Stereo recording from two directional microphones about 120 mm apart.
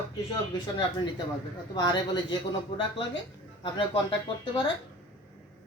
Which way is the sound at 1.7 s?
40° left (ahead or behind).